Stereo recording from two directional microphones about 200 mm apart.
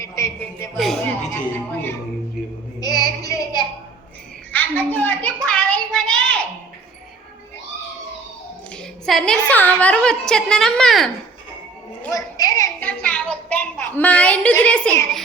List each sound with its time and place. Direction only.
0.0 s frog: 15° left (ahead or behind)
0.8 s a woman's voice: centre (ahead or behind)
2.8 s child singing: 20° left (ahead or behind)
4.5 s a child's voice: 10° left (ahead or behind)
8.7 s a woman's voice: centre (ahead or behind)
12.1 s a woman's voice: 15° left (ahead or behind)
12.9 s a woman's voice: 5° left (ahead or behind)